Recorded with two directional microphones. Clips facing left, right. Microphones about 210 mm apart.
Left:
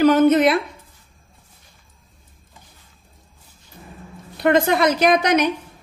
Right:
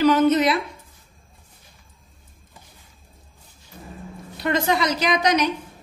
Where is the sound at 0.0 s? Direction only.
50° left (ahead or behind).